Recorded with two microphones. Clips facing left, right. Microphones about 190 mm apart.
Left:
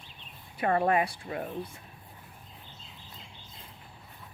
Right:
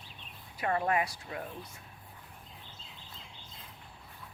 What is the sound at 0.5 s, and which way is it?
Speech, 35° left (ahead or behind).